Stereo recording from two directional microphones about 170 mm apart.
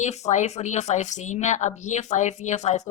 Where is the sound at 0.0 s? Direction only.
45° left (ahead or behind).